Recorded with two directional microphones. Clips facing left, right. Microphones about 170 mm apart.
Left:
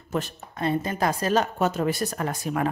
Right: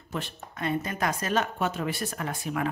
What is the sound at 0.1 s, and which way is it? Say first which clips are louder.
A woman's voice: left 6 dB; 40° left (ahead or behind).